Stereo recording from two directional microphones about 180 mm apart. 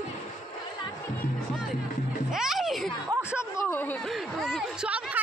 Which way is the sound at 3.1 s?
25° right (ahead or behind).